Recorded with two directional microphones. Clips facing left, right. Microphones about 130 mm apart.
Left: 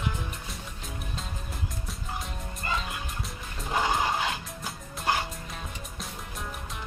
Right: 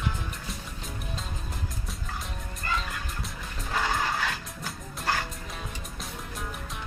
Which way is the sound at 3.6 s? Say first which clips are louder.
Left 2 dB; 20° left (ahead or behind).